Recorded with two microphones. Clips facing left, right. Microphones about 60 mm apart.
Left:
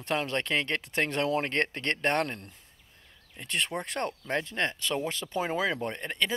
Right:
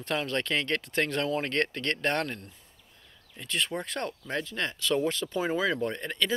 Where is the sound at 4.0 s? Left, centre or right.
Left.